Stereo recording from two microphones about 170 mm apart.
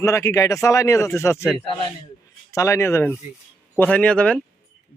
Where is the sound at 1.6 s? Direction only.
30° left (ahead or behind).